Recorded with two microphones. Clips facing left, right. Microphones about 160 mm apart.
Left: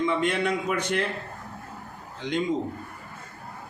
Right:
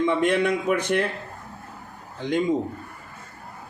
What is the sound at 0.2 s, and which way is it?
Speech, 60° right (ahead or behind).